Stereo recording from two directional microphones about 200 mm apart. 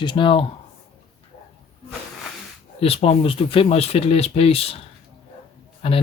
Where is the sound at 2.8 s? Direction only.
30° left (ahead or behind).